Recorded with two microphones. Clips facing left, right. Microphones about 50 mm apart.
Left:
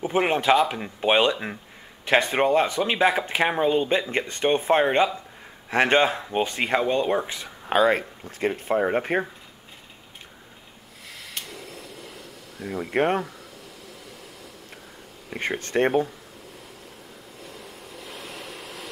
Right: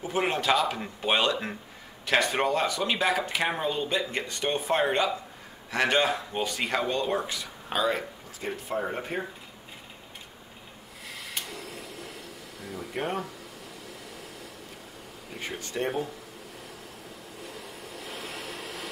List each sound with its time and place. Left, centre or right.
0.0 s speech: left
7.7 s speech: left
12.6 s speech: left
15.3 s speech: left
17.6 s vehicle: centre